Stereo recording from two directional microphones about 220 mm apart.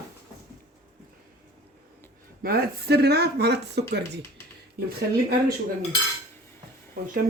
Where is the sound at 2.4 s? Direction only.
45° right (ahead or behind).